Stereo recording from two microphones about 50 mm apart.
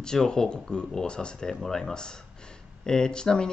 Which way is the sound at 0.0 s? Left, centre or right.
Centre.